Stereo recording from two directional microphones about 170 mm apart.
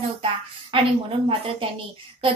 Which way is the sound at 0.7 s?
30° right (ahead or behind).